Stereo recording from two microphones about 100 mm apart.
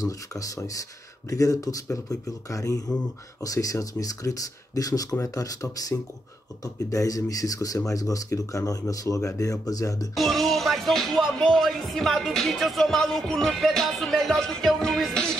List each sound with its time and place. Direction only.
0.0 s speech: 35° left (ahead or behind)
10.1 s music: centre (ahead or behind)